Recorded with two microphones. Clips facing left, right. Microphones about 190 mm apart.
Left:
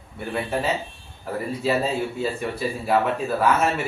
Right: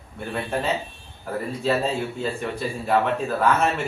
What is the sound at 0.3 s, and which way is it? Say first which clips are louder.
A man's voice: left 1 dB; 5° left (ahead or behind).